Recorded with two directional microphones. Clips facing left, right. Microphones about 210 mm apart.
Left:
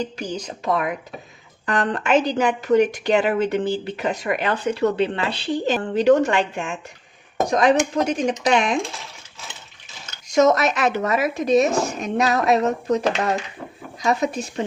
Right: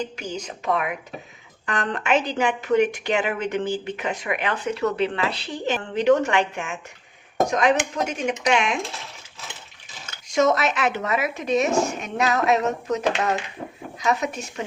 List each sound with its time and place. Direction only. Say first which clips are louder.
0.2 s a woman's voice: left 3 dB; 35° left (ahead or behind)
10.2 s a woman's voice: left 3 dB; 40° left (ahead or behind)